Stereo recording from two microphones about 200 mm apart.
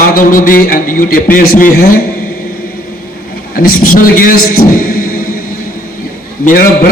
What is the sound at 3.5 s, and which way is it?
A man's voice, 45° left (ahead or behind).